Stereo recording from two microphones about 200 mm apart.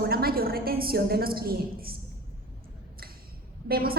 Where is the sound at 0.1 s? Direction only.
50° right (ahead or behind).